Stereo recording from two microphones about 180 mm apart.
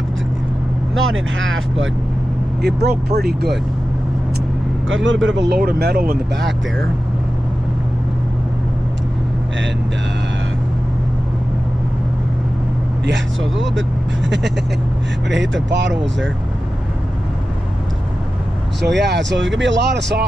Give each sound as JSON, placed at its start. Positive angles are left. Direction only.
{"t": 0.9, "sound": "speech", "side_deg": -90}
{"t": 2.6, "sound": "speech", "side_deg": -65}
{"t": 4.8, "sound": "speech", "side_deg": -90}
{"t": 5.6, "sound": "speech", "side_deg": -60}
{"t": 15.2, "sound": "speech", "side_deg": -85}
{"t": 18.8, "sound": "speech", "side_deg": -70}